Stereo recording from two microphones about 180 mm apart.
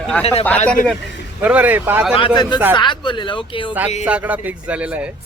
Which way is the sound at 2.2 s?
25° left (ahead or behind).